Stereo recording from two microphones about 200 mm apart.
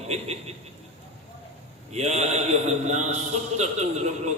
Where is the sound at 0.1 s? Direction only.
30° right (ahead or behind).